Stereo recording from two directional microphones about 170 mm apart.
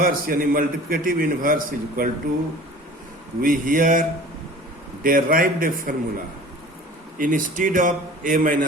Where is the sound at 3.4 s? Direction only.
55° right (ahead or behind).